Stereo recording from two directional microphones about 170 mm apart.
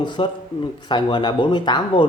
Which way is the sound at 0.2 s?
30° left (ahead or behind).